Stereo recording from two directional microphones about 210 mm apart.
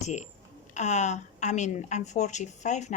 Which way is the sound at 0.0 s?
35° left (ahead or behind).